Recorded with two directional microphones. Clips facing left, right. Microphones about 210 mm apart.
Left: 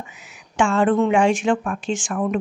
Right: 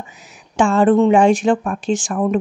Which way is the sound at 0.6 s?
35° right (ahead or behind).